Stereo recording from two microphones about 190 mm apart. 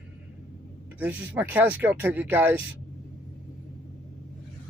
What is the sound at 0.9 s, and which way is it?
Speech, 10° right (ahead or behind).